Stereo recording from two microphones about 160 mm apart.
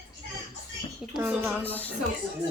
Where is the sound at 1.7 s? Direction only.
10° left (ahead or behind).